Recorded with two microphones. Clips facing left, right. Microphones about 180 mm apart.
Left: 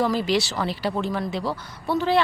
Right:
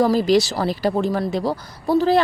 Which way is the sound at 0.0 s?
40° right (ahead or behind).